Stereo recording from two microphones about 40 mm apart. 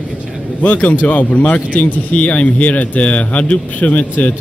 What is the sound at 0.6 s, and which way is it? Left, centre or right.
A man's voice, left.